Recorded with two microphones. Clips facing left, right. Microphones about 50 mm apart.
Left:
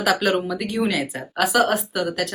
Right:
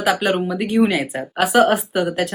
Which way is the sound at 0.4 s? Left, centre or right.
Centre.